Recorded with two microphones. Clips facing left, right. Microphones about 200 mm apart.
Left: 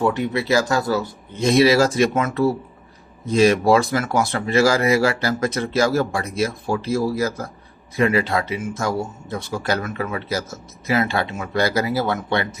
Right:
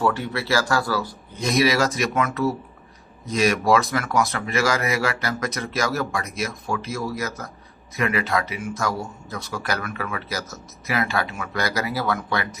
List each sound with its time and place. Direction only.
0.0 s speech: 20° left (ahead or behind)